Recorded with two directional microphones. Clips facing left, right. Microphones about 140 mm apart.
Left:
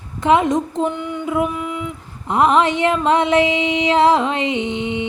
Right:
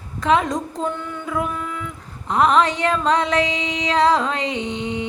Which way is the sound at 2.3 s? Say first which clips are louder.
Left 2 dB; 25° left (ahead or behind).